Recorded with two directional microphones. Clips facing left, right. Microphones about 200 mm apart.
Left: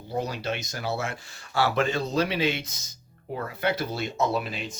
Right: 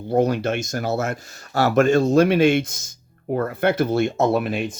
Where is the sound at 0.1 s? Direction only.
55° right (ahead or behind).